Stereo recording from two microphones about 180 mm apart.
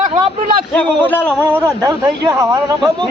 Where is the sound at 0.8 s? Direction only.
10° left (ahead or behind).